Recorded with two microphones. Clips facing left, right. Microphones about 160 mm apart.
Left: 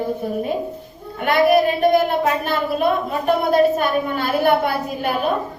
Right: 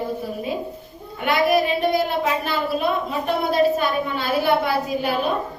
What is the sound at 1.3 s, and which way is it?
A woman's voice, 50° left (ahead or behind).